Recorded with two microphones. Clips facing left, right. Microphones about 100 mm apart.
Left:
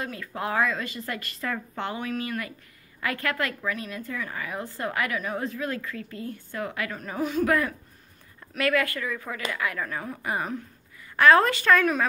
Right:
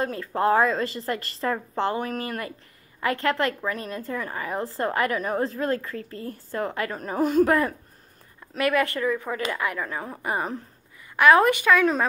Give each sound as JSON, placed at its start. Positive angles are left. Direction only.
{"t": 0.0, "sound": "a woman's voice", "side_deg": -35}
{"t": 3.0, "sound": "a woman's voice", "side_deg": -30}
{"t": 7.4, "sound": "a woman's voice", "side_deg": -30}
{"t": 11.1, "sound": "speech", "side_deg": -15}